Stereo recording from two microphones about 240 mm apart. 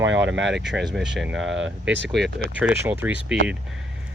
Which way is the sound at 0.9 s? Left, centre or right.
Centre.